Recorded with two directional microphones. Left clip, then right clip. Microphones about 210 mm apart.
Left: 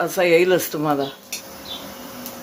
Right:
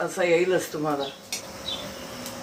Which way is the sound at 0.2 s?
55° left (ahead or behind).